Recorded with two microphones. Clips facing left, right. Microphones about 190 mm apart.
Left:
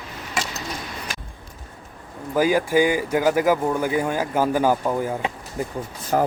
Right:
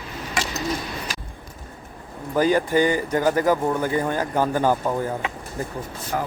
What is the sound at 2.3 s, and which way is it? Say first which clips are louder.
Speech: even; 5° left (ahead or behind).